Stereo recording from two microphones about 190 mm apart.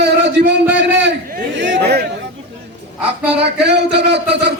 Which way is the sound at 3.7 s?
65° right (ahead or behind).